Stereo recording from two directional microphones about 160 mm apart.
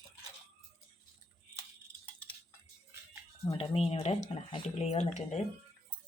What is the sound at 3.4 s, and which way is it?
Speech, 35° left (ahead or behind).